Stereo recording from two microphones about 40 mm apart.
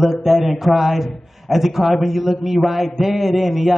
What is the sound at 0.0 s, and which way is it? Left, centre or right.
A man's voice, centre.